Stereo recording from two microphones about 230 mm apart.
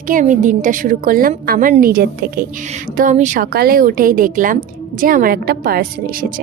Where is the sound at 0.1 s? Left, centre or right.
Right.